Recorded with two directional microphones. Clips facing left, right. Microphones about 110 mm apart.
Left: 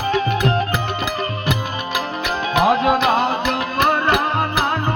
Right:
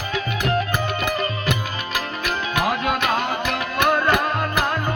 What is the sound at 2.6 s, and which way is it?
Music, 30° left (ahead or behind).